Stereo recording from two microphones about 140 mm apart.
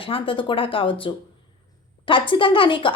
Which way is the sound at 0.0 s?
40° left (ahead or behind).